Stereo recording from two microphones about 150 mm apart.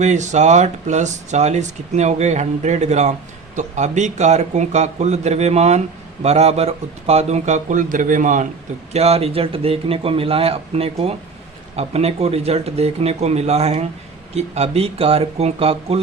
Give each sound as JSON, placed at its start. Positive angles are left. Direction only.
{"t": 0.0, "sound": "speech", "side_deg": -50}
{"t": 8.9, "sound": "speech", "side_deg": -45}